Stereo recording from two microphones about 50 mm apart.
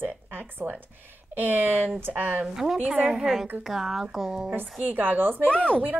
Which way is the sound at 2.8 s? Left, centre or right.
Right.